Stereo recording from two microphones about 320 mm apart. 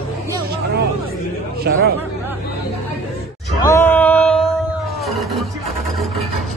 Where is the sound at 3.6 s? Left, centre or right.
Centre.